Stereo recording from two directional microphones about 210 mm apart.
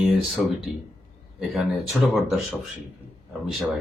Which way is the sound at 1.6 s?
Centre (ahead or behind).